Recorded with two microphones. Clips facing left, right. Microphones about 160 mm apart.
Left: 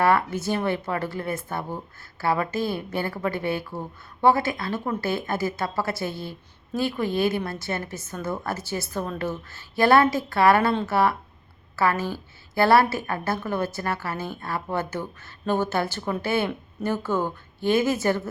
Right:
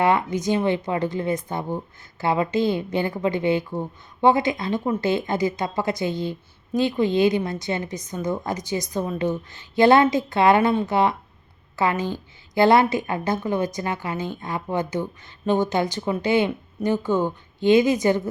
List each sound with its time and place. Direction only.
0.0 s a woman's voice: 20° right (ahead or behind)